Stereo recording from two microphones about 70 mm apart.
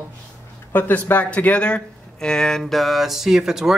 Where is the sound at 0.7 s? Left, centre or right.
Left; by 3.7 s centre.